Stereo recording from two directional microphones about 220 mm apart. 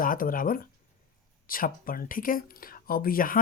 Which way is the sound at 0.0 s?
40° left (ahead or behind).